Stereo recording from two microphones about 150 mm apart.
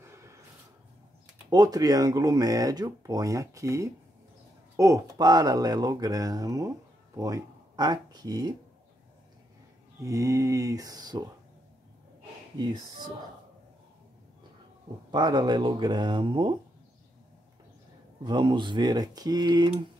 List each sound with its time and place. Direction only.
0.0 s snort: 20° right (ahead or behind)
1.5 s speech: 25° right (ahead or behind)
10.0 s speech: 20° right (ahead or behind)
12.5 s speech: 30° right (ahead or behind)
15.0 s speech: 30° right (ahead or behind)
18.2 s speech: 30° right (ahead or behind)